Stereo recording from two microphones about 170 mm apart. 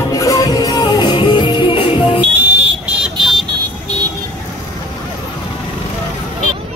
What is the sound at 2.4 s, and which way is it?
Vehicle, 5° right (ahead or behind).